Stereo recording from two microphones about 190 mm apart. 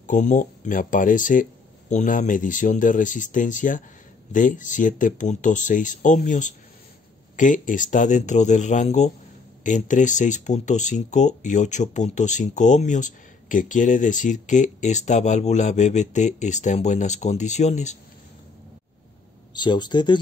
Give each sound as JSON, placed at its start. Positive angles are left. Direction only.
{"t": 0.0, "sound": "speech", "side_deg": 40}
{"t": 19.5, "sound": "speech", "side_deg": 25}